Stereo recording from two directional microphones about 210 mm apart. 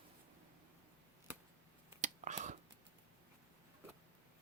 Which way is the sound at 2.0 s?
35° right (ahead or behind).